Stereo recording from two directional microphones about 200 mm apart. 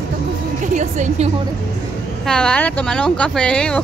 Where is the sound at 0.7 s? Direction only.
35° right (ahead or behind).